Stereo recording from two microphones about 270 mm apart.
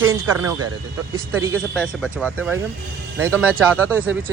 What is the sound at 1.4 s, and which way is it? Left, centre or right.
Speech, centre.